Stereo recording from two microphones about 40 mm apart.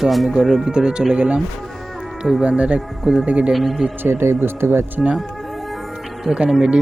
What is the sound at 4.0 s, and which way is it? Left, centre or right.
Speech, right.